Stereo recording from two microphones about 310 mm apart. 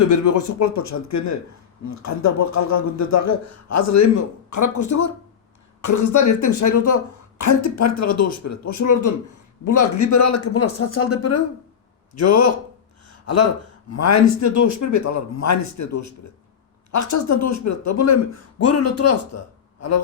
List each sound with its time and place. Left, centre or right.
0.1 s a woman's voice: left
13.1 s a sound: left
13.9 s a woman's voice: left